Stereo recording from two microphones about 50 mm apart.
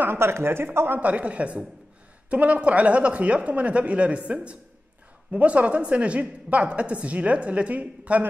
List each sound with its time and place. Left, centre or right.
0.0 s speech: right
1.0 s speech: right